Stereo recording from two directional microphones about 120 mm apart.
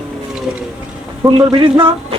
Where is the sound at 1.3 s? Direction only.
45° right (ahead or behind).